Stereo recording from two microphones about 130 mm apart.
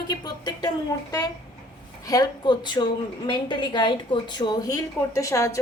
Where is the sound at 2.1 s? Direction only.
30° left (ahead or behind).